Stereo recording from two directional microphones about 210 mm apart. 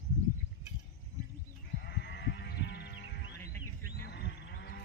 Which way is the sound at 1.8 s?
50° left (ahead or behind).